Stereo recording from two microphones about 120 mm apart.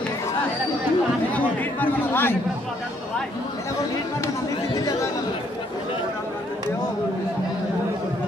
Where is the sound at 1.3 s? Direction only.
15° left (ahead or behind).